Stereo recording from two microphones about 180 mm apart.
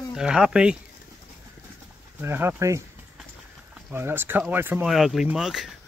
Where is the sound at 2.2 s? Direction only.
15° right (ahead or behind).